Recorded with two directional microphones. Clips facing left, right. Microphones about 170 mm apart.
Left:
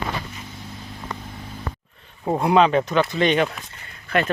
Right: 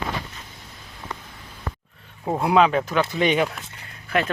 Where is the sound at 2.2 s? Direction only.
Centre (ahead or behind).